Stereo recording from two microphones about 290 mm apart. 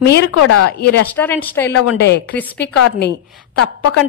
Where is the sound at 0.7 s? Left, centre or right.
Left.